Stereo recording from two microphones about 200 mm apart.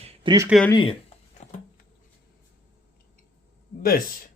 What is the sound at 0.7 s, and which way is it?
Speech, 25° left (ahead or behind).